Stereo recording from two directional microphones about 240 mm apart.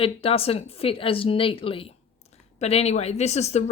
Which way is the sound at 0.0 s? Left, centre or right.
Left.